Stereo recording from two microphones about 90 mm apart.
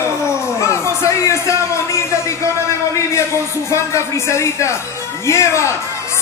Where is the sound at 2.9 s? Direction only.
30° left (ahead or behind).